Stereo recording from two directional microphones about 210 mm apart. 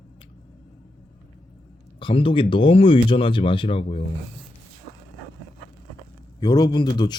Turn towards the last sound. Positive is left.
turn(degrees=20)  # may be behind; listen again after turning